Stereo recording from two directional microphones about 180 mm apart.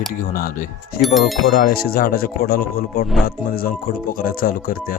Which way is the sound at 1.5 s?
60° left (ahead or behind).